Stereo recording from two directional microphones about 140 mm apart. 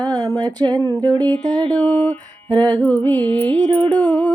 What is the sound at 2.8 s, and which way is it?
Humming, 15° left (ahead or behind).